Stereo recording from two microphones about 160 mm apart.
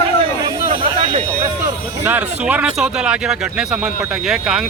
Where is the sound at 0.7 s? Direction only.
40° right (ahead or behind).